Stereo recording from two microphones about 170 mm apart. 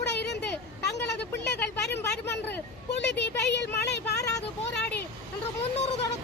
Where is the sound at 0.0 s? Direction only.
85° left.